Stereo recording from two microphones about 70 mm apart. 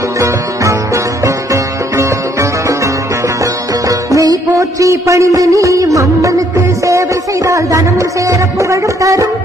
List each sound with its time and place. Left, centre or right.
0.2 s music: right
4.1 s a sound: right
8.3 s music: right